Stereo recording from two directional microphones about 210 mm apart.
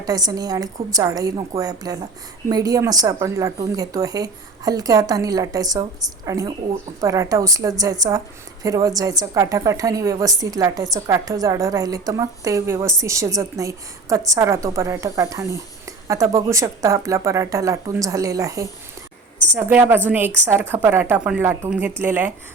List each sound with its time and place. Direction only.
0.0 s a woman's voice: 20° right (ahead or behind)